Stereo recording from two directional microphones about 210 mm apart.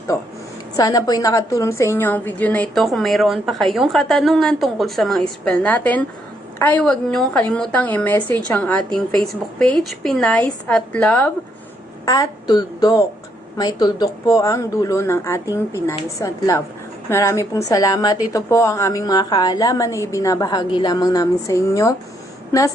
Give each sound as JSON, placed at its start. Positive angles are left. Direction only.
{"t": 0.1, "sound": "a woman's voice", "side_deg": 15}